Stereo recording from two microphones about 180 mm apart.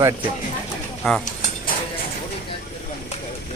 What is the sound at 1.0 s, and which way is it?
Speech, 5° left (ahead or behind).